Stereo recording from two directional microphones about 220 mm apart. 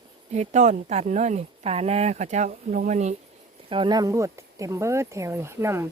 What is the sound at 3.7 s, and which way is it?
Speech, 20° right (ahead or behind).